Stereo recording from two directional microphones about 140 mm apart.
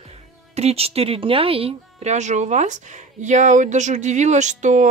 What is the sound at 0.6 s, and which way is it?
A woman's voice, 45° right (ahead or behind).